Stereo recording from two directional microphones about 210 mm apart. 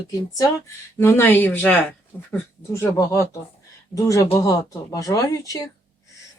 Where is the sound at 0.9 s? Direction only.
10° left (ahead or behind).